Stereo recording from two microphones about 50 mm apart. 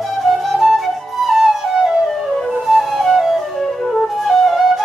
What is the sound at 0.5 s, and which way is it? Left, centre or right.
Flute, centre.